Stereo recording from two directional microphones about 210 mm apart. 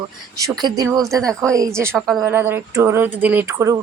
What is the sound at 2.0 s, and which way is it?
Speech, centre (ahead or behind).